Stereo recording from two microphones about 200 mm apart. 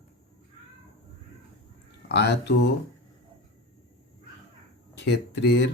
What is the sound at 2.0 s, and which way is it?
Speech, 55° left (ahead or behind).